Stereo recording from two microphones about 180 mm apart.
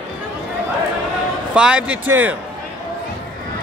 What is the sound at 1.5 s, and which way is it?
Speech, 5° right (ahead or behind).